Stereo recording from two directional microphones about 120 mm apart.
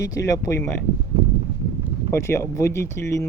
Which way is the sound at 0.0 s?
30° left (ahead or behind).